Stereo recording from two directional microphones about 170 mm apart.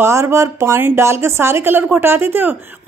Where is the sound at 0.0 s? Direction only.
15° right (ahead or behind).